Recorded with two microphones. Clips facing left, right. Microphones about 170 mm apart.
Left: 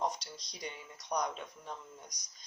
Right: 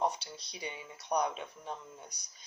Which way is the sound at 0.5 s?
15° right (ahead or behind).